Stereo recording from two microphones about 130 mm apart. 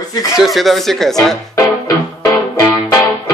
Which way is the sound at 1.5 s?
25° left (ahead or behind).